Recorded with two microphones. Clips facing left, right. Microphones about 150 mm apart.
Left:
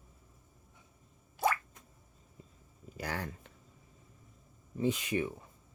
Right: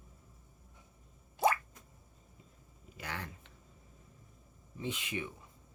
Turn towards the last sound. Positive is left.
turn(degrees=40)  # may be behind; listen again after turning